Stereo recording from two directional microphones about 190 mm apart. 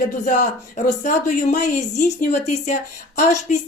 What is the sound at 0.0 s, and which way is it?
A woman's voice, 45° left (ahead or behind).